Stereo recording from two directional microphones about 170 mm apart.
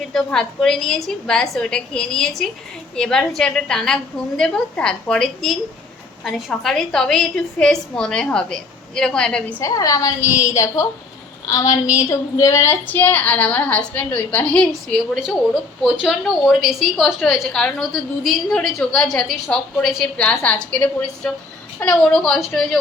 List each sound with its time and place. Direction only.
0.1 s a woman's voice: centre (ahead or behind)
9.6 s a woman's voice: 20° left (ahead or behind); by 22.8 s centre (ahead or behind)